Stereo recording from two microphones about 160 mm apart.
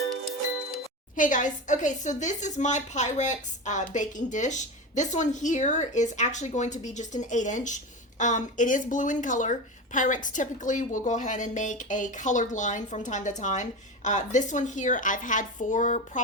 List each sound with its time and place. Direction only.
1.1 s a woman's voice: 55° left (ahead or behind)